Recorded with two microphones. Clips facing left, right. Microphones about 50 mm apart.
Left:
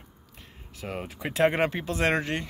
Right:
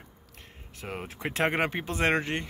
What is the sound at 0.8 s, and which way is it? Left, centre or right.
Speech, centre.